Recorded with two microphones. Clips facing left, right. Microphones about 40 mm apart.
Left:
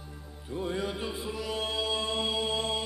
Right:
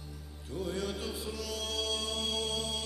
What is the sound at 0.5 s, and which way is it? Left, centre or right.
Music, left.